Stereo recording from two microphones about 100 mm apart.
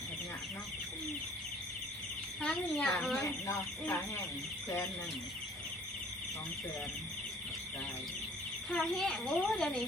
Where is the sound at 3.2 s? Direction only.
30° left (ahead or behind).